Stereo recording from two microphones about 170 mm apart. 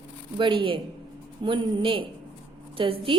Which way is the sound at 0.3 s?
30° right (ahead or behind).